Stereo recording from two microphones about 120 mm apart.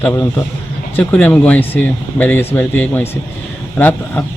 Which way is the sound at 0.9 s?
10° left (ahead or behind).